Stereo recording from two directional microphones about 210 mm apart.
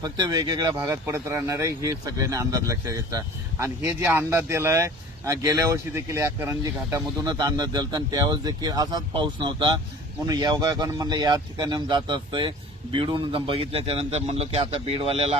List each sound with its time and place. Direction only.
0.0 s speech: 20° right (ahead or behind)